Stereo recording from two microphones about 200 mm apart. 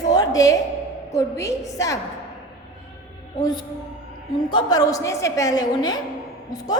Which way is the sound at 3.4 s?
20° left (ahead or behind).